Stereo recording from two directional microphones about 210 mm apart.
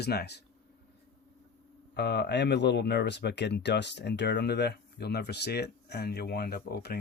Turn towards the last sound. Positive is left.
turn(degrees=50)  # may be behind; listen again after turning